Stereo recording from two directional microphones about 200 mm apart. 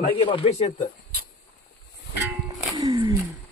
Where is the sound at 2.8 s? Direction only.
20° right (ahead or behind).